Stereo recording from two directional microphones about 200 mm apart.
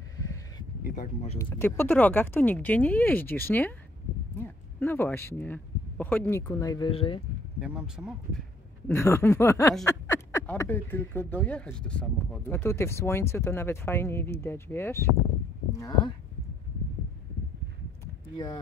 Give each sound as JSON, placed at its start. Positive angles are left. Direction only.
{"t": 0.2, "sound": "a sound", "side_deg": 15}
{"t": 0.8, "sound": "speech", "side_deg": 35}
{"t": 1.4, "sound": "speech", "side_deg": 10}
{"t": 7.6, "sound": "speech", "side_deg": -5}
{"t": 8.8, "sound": "speech", "side_deg": 15}
{"t": 18.0, "sound": "a sound", "side_deg": 20}